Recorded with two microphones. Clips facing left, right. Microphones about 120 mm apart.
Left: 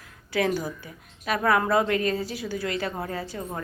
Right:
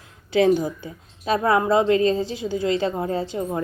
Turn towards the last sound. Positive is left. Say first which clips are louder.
# right 7 dB
turn(degrees=-25)  # may be behind; listen again after turning